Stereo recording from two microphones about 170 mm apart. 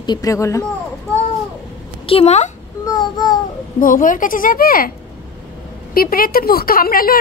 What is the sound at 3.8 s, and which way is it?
A woman's voice, 55° left (ahead or behind).